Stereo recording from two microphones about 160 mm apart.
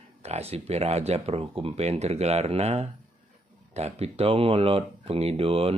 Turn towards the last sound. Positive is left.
turn(degrees=-35)  # may be behind; listen again after turning